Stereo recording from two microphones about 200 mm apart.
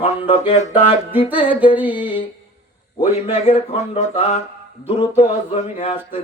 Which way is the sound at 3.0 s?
35° left (ahead or behind).